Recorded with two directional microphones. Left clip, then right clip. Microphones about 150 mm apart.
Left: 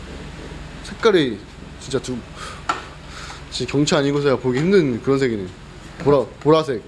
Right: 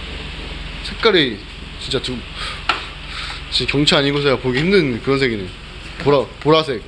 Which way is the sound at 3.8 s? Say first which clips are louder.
Right 2 dB; 20° left (ahead or behind).